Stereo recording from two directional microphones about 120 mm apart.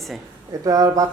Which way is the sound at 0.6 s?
30° right (ahead or behind).